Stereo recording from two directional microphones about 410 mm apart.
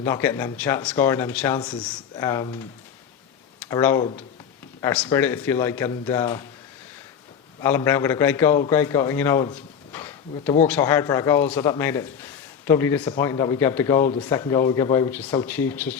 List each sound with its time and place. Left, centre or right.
0.0 s a man's voice: centre
3.7 s a man's voice: centre
7.6 s a man's voice: centre